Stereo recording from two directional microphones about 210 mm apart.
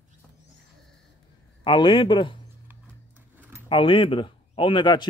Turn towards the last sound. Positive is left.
turn(degrees=20)  # may be behind; listen again after turning